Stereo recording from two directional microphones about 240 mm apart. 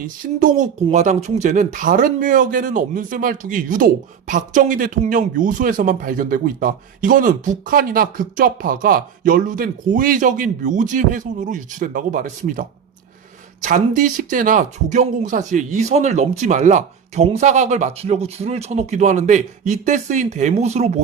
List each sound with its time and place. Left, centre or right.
0.3 s speech: right